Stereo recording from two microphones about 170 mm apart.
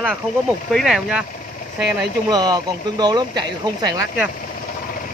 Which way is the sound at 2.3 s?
25° right (ahead or behind).